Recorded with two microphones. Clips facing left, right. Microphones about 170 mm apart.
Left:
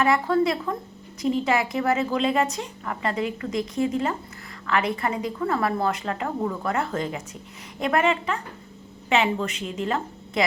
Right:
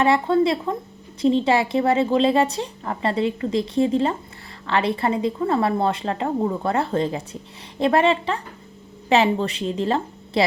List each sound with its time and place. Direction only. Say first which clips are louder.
0.0 s a woman's voice: right 3 dB; 30° right (ahead or behind)